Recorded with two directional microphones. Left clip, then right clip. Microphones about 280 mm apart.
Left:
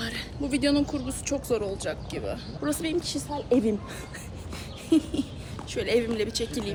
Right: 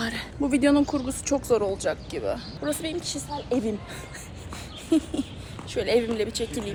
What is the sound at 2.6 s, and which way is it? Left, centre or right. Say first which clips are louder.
Speech: left 1 dB; centre.